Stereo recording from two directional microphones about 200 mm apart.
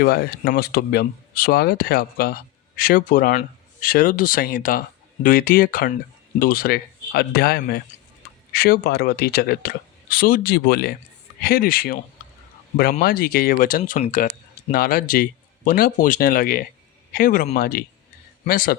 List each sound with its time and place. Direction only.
0.0 s speech: 50° left (ahead or behind)